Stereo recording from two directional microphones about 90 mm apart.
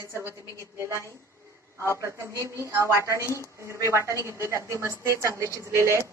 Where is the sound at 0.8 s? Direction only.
35° right (ahead or behind).